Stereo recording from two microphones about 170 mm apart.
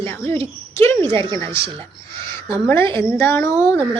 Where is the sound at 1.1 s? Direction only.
30° right (ahead or behind).